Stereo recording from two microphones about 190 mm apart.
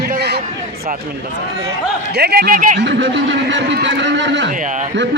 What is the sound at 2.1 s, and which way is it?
Speech, 55° right (ahead or behind).